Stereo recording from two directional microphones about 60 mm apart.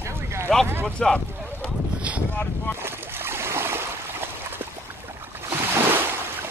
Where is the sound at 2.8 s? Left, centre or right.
Right.